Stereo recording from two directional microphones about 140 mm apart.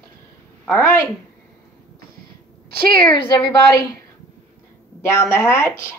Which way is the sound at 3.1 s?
30° left (ahead or behind).